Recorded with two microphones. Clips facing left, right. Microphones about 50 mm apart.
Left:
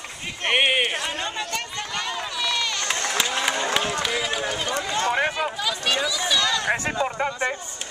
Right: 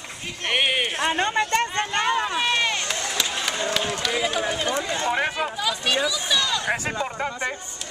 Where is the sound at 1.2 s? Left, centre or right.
Right.